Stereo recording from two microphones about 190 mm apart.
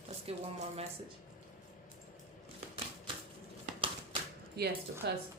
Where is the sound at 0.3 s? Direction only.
30° right (ahead or behind).